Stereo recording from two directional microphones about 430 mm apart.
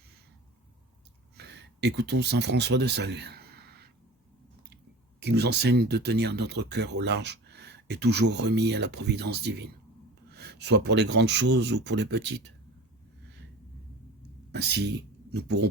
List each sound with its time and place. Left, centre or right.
1.4 s speech: right
5.2 s speech: right
14.5 s speech: right